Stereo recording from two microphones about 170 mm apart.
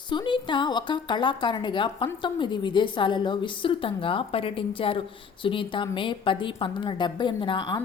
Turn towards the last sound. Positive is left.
turn(degrees=30)  # may be behind; listen again after turning